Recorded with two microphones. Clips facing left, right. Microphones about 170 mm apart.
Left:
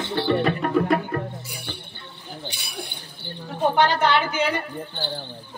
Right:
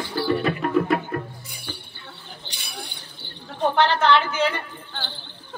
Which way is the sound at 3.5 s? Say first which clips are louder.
Even; 10° left (ahead or behind).